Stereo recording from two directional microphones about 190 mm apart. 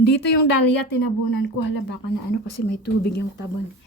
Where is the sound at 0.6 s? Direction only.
65° left (ahead or behind).